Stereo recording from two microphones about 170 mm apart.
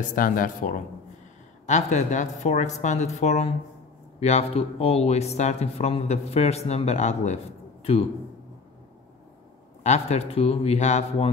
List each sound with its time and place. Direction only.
0.1 s a woman's voice: 55° left (ahead or behind); by 8.0 s 35° left (ahead or behind)
9.8 s speech: 40° left (ahead or behind)